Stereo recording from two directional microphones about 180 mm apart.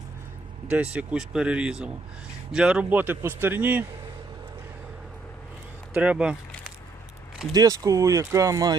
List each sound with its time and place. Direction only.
0.7 s a man's voice: 5° right (ahead or behind)
5.9 s speech: 5° right (ahead or behind)
7.5 s speech: 20° right (ahead or behind)